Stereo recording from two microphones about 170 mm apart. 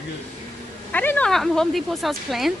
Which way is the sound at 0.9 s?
10° left (ahead or behind).